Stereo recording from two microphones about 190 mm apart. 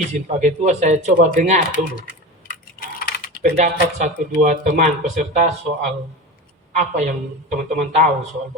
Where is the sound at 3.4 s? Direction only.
40° right (ahead or behind).